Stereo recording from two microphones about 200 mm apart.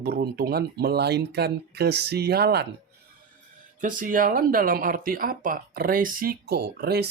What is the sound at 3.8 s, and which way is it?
Speech, 40° right (ahead or behind).